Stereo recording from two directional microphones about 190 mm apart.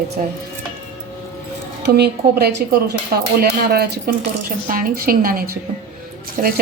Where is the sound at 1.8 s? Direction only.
55° right (ahead or behind).